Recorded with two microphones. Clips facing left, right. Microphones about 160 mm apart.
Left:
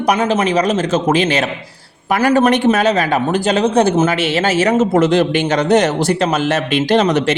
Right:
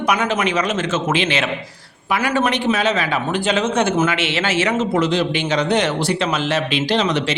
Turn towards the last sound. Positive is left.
turn(degrees=50)  # may be behind; listen again after turning